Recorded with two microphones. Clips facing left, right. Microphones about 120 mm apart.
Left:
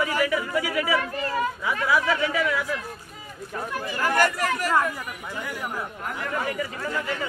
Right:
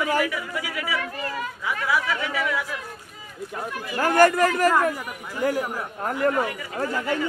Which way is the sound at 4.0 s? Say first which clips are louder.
Right 6 dB; 45° right (ahead or behind).